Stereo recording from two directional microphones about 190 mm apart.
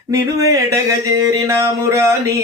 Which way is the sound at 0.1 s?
15° right (ahead or behind).